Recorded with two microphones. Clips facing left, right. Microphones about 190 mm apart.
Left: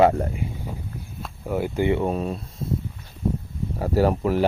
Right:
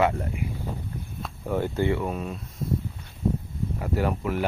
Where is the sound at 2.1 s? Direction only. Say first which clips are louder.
Left 6 dB; 35° left (ahead or behind).